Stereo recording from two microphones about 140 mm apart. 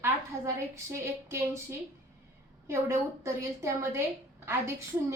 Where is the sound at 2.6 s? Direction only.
20° right (ahead or behind).